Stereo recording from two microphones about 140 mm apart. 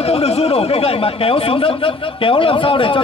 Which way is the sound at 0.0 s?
45° left (ahead or behind).